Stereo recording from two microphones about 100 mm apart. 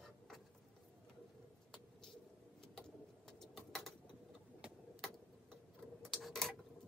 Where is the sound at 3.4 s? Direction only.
5° left (ahead or behind).